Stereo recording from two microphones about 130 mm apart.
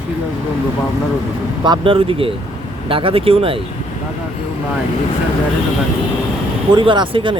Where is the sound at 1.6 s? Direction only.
40° right (ahead or behind).